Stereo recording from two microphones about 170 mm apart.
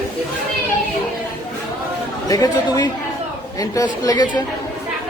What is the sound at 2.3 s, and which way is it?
A woman's voice, 20° left (ahead or behind).